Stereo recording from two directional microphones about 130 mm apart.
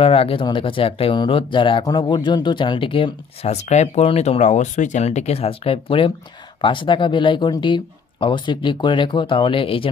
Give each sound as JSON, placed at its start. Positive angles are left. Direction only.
{"t": 0.0, "sound": "speech", "side_deg": 45}